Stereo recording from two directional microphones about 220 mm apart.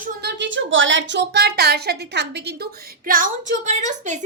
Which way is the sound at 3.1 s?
40° right (ahead or behind).